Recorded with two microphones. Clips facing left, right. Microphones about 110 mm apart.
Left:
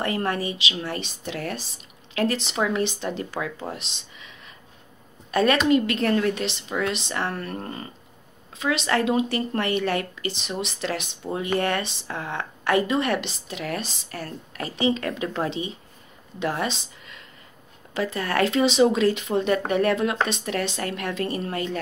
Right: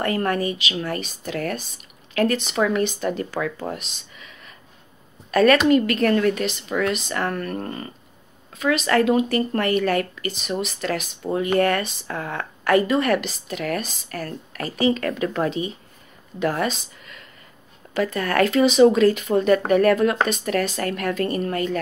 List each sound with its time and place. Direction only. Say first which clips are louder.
0.0 s speech: right 3 dB; 25° left (ahead or behind)
5.3 s speech: right 4 dB; 25° left (ahead or behind)
7.5 s speech: right 4 dB; 45° right (ahead or behind)
8.5 s a woman's voice: right 4 dB; 25° left (ahead or behind)